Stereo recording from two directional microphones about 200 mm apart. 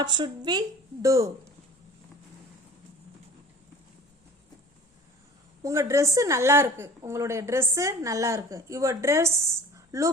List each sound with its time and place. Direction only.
0.0 s a woman's voice: 20° right (ahead or behind)
5.6 s a woman's voice: 15° right (ahead or behind)
9.7 s a sound: 15° right (ahead or behind)